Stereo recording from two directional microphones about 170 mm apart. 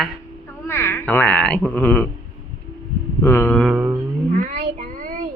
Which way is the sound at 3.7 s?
10° right (ahead or behind).